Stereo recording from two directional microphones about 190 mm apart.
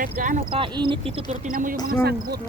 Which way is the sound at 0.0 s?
45° right (ahead or behind).